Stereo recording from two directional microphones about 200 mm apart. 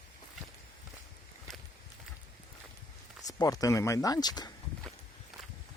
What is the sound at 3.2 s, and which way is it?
Speech, 20° left (ahead or behind).